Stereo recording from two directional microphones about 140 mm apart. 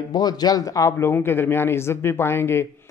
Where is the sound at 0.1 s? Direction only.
30° left (ahead or behind).